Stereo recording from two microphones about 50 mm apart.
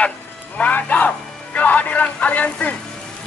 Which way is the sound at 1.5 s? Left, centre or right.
Left.